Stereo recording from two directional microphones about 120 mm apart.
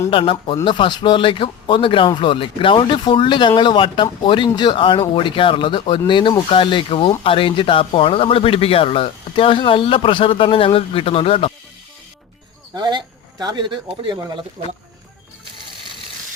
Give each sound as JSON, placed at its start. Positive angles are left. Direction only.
{"t": 0.1, "sound": "speech", "side_deg": 45}
{"t": 12.7, "sound": "speech", "side_deg": -40}